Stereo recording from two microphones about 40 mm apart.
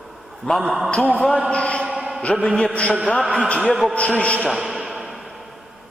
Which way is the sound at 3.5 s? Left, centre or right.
Left.